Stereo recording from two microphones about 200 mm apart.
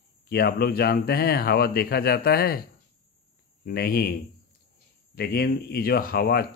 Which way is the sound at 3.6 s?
50° left (ahead or behind).